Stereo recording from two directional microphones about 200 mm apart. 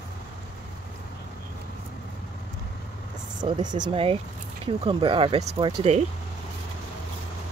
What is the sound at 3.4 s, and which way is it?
Speech, 20° right (ahead or behind).